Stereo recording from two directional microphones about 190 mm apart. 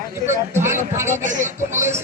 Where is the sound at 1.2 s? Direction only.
40° right (ahead or behind).